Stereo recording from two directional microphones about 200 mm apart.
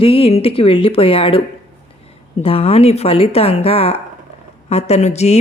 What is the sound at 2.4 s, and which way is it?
A woman's voice, 30° left (ahead or behind).